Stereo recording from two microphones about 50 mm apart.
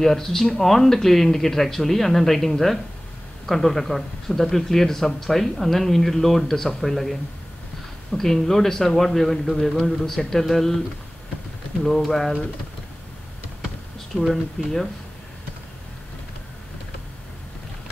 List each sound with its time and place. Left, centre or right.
0.0 s speech: centre
11.8 s speech: centre
13.9 s speech: centre